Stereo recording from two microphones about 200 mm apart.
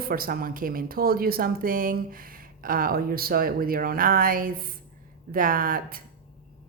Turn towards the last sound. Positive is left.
turn(degrees=-45)  # may be behind; listen again after turning